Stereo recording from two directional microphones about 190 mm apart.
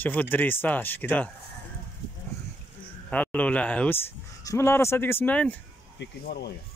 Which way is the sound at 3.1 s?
5° left (ahead or behind).